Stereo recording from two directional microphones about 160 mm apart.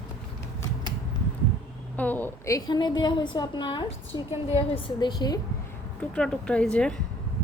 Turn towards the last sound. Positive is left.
turn(degrees=5)  # may be behind; listen again after turning